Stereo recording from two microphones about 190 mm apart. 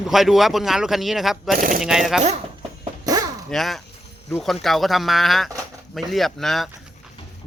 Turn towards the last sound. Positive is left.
turn(degrees=0)  # may be behind; listen again after turning